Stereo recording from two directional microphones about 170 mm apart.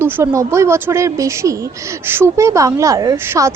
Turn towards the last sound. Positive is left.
turn(degrees=-15)  # may be behind; listen again after turning